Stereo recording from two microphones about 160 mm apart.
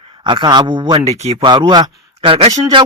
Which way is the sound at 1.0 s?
40° right (ahead or behind).